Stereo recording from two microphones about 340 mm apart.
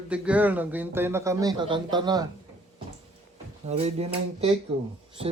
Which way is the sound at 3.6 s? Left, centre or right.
Centre.